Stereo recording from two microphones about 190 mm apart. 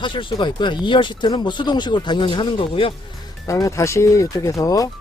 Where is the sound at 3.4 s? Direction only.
15° left (ahead or behind).